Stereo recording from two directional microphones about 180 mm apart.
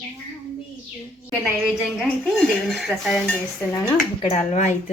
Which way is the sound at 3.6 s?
10° left (ahead or behind).